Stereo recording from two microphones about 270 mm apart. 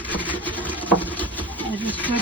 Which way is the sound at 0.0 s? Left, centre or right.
Centre.